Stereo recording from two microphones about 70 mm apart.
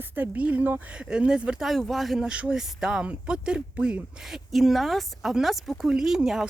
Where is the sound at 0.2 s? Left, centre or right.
Right.